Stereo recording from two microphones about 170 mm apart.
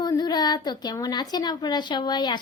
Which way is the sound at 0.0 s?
25° left (ahead or behind).